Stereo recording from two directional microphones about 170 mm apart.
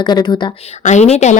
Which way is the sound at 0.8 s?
40° left (ahead or behind).